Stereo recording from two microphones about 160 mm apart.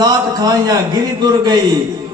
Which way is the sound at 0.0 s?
25° right (ahead or behind).